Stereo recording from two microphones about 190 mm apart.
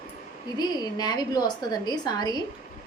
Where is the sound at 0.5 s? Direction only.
20° left (ahead or behind).